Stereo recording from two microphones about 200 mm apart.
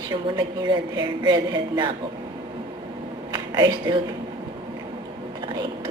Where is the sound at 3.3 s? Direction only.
20° right (ahead or behind).